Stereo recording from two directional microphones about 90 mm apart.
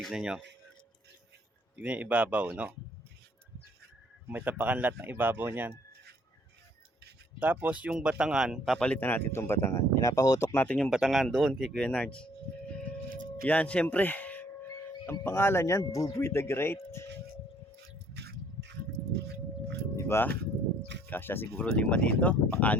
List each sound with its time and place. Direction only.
0.0 s speech: 5° right (ahead or behind)
1.7 s speech: 15° right (ahead or behind)
4.3 s speech: 20° right (ahead or behind)
7.3 s speech: 20° right (ahead or behind); by 8.8 s centre (ahead or behind)
8.8 s speech: 15° left (ahead or behind); by 10.5 s 40° left (ahead or behind)
10.5 s speech: 20° left (ahead or behind)
10.8 s speech: centre (ahead or behind)
13.4 s a sound: 15° left (ahead or behind)
15.2 s speech: 25° left (ahead or behind)
20.0 s speech: 25° left (ahead or behind)